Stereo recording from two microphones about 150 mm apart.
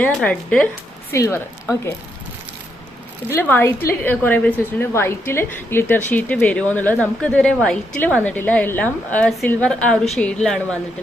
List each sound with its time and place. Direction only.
0.1 s speech: 5° left (ahead or behind)
1.1 s speech: 20° left (ahead or behind)
3.2 s a woman's voice: 15° left (ahead or behind)